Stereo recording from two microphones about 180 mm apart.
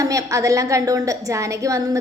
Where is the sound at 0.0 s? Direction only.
20° right (ahead or behind).